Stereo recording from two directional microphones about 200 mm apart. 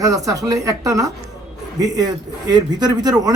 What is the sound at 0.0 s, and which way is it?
Speech, 15° right (ahead or behind).